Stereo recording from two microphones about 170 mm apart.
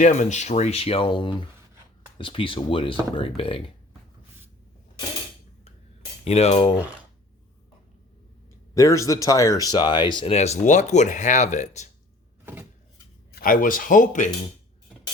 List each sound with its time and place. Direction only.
0.0 s speech: 45° left (ahead or behind)
6.2 s speech: 35° left (ahead or behind)
8.7 s speech: 20° left (ahead or behind); by 11.9 s 45° left (ahead or behind)
13.3 s speech: 55° left (ahead or behind)